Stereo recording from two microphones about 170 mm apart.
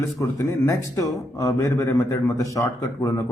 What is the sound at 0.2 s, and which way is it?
A man's voice, 20° left (ahead or behind).